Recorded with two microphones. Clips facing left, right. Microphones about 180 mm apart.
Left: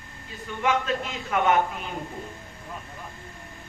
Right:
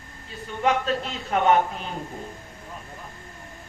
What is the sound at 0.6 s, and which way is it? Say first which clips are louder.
Speech: right 2 dB; 35° right (ahead or behind).